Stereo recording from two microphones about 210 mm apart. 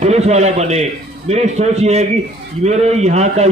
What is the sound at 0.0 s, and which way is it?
A man's voice, 30° right (ahead or behind).